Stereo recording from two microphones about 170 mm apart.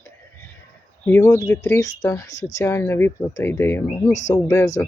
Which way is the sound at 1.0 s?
15° left (ahead or behind).